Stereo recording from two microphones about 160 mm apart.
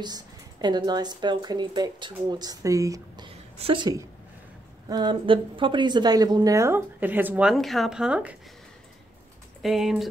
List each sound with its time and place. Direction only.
0.0 s a woman's voice: 25° right (ahead or behind)
3.3 s a woman's voice: 35° right (ahead or behind); by 8.4 s 10° right (ahead or behind)
9.6 s speech: centre (ahead or behind)